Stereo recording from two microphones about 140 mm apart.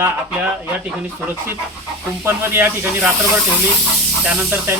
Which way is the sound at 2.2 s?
15° right (ahead or behind).